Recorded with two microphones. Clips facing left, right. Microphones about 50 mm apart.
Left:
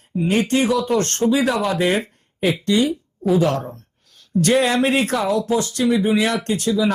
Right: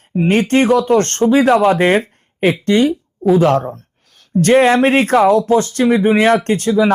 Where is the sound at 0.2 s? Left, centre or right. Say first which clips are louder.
Right 5 dB; right.